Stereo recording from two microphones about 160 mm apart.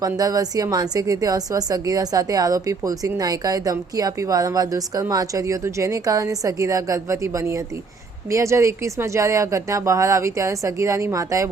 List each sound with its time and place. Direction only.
0.0 s a woman's voice: 25° right (ahead or behind)